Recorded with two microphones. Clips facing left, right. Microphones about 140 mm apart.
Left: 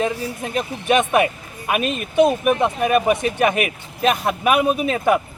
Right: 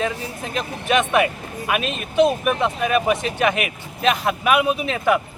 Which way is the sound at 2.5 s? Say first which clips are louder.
Left 3 dB; 15° left (ahead or behind).